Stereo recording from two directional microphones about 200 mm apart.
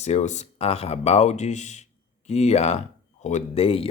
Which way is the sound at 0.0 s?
35° left (ahead or behind).